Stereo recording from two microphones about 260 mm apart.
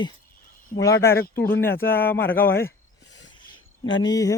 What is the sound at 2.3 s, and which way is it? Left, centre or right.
Speech, left.